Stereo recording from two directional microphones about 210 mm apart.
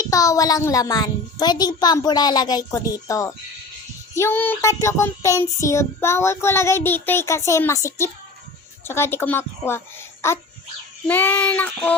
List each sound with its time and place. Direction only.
0.0 s child singing: 15° left (ahead or behind)
8.8 s a woman's voice: 10° left (ahead or behind)
11.1 s child singing: 10° left (ahead or behind)